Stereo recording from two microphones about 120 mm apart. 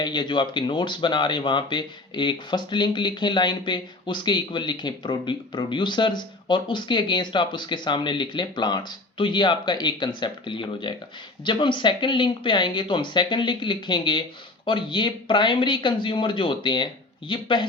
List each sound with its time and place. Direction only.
0.0 s speech: 40° left (ahead or behind)